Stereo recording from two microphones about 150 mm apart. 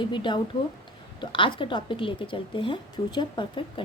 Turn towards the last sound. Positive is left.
turn(degrees=35)  # may be behind; listen again after turning